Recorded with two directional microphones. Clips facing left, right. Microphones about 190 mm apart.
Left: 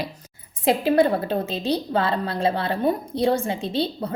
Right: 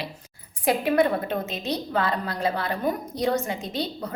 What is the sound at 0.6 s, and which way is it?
A woman's voice, 30° left (ahead or behind).